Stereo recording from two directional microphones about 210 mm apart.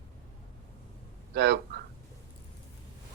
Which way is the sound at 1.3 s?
55° right (ahead or behind).